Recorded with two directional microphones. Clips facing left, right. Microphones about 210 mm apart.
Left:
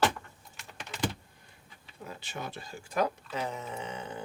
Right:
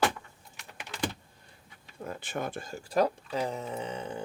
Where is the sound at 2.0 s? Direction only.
50° right (ahead or behind); by 3.1 s 35° right (ahead or behind).